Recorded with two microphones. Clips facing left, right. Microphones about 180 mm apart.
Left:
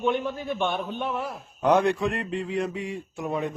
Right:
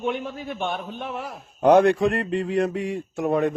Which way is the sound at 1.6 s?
55° right (ahead or behind).